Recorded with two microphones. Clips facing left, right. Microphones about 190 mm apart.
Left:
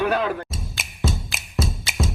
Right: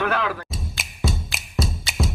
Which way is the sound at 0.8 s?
Centre (ahead or behind).